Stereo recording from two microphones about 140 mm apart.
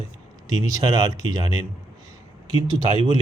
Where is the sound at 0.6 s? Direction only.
25° right (ahead or behind).